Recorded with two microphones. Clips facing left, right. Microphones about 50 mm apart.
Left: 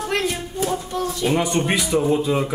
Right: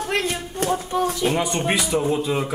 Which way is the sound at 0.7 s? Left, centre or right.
Right.